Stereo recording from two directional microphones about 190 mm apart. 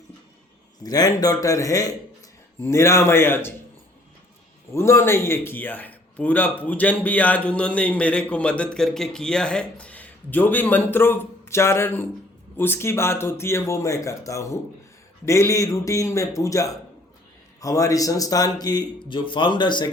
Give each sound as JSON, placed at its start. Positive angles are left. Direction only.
{"t": 0.8, "sound": "a man's voice", "side_deg": 20}
{"t": 4.7, "sound": "a man's voice", "side_deg": 15}